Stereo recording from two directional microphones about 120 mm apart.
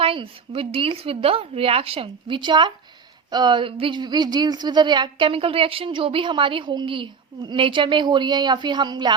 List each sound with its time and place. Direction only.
0.0 s a woman's voice: 50° right (ahead or behind)